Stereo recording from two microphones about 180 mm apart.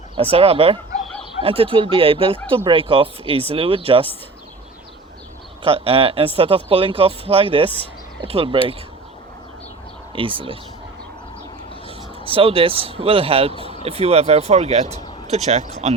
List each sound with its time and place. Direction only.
0.2 s speech: 30° right (ahead or behind)
5.6 s speech: 30° right (ahead or behind)
10.1 s speech: 30° right (ahead or behind)
11.9 s a man's voice: 30° right (ahead or behind)